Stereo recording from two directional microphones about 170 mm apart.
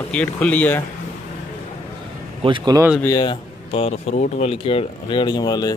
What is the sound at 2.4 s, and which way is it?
Speech, 25° right (ahead or behind).